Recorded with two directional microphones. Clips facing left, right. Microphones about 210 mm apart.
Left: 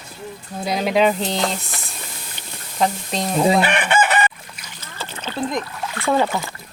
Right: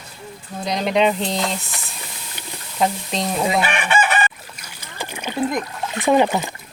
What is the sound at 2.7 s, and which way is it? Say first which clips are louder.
Speech: even; centre (ahead or behind).